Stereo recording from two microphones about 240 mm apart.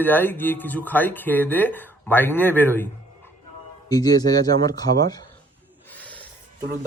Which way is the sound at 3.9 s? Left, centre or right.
Centre.